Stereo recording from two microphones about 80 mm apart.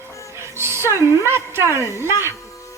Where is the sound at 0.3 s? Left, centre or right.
Right.